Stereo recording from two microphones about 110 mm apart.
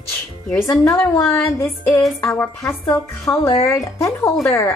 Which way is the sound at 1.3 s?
20° left (ahead or behind).